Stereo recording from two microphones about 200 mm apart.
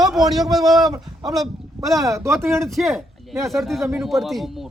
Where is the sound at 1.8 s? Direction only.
15° right (ahead or behind).